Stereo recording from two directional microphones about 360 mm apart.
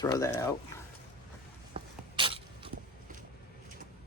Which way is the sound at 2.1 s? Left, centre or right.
Centre.